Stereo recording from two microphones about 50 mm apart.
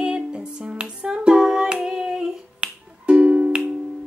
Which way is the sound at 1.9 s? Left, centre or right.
Centre.